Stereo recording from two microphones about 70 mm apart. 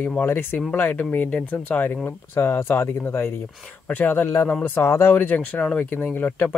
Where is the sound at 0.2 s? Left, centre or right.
Left.